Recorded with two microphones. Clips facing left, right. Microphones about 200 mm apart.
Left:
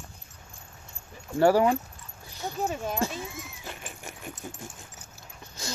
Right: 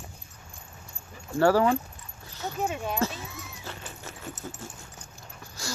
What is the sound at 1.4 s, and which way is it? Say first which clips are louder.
Speech: left 1 dB; 15° left (ahead or behind).